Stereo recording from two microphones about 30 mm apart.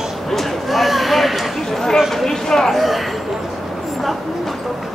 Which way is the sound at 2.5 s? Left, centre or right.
Centre.